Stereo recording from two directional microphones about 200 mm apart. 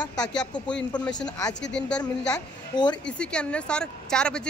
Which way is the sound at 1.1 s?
20° left (ahead or behind).